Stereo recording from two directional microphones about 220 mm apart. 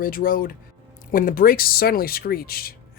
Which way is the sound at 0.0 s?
40° left (ahead or behind).